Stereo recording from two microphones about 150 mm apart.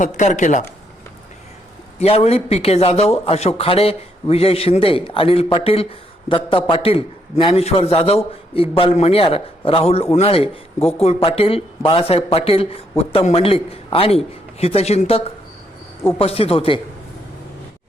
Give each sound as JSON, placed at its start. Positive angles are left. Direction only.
{"t": 0.0, "sound": "speech", "side_deg": 55}
{"t": 2.0, "sound": "a man's voice", "side_deg": 45}